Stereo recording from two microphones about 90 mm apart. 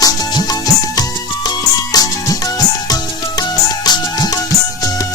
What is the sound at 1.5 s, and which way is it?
Music, 45° left (ahead or behind).